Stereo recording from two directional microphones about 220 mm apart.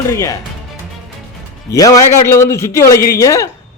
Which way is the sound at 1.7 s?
15° left (ahead or behind).